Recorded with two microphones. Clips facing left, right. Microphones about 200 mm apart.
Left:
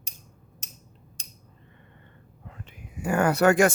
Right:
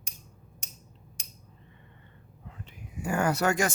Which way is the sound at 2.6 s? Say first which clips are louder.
Left 4 dB; 60° left (ahead or behind).